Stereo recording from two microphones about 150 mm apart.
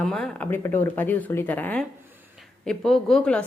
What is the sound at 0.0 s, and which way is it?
A woman's voice, 5° left (ahead or behind).